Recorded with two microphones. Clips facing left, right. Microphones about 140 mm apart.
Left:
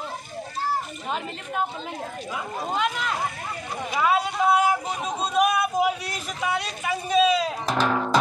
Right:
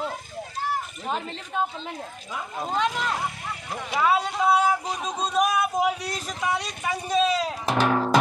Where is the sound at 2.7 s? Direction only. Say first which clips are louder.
Right 1 dB; centre (ahead or behind).